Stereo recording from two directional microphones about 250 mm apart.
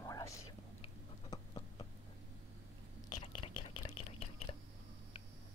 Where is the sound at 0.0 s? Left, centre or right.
Centre.